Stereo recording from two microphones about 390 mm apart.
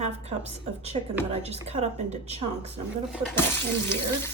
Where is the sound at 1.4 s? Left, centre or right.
Centre.